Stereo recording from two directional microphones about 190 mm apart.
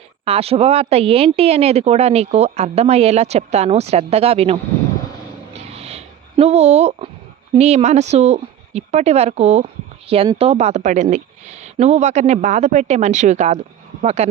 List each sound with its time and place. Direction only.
0.3 s a woman's voice: 30° right (ahead or behind)
5.5 s a sound: 30° right (ahead or behind)
7.5 s a woman's voice: 35° right (ahead or behind)